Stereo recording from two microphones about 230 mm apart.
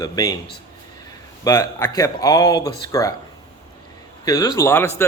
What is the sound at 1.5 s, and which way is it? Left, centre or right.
Speech, centre.